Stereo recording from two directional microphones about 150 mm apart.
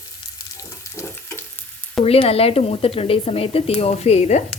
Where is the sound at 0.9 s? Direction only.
15° left (ahead or behind).